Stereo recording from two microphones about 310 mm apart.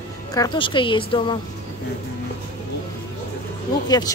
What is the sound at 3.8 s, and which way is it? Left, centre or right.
Speech, centre.